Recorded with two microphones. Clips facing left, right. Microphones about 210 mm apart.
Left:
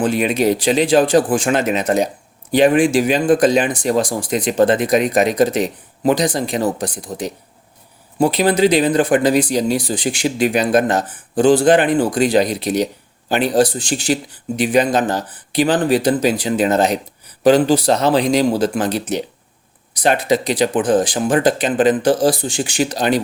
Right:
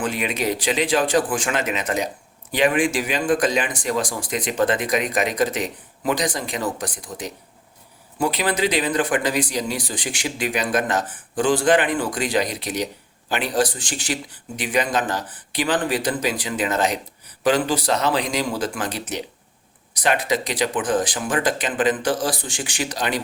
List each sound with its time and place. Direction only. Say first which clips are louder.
0.0 s speech: left 8 dB; 35° left (ahead or behind)
9.9 s speech: left 9 dB; 40° left (ahead or behind)
20.2 s speech: left 6 dB; 30° left (ahead or behind)